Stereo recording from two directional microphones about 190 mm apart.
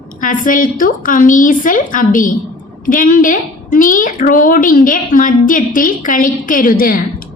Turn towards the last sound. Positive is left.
turn(degrees=50)  # may be behind; listen again after turning